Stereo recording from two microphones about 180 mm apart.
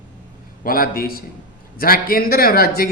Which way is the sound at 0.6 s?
55° left (ahead or behind).